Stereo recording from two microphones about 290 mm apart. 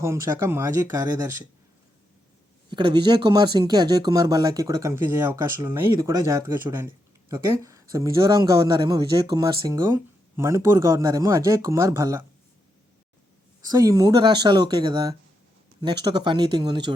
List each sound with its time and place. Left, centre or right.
0.0 s speech: centre
2.6 s speech: centre
13.7 s speech: centre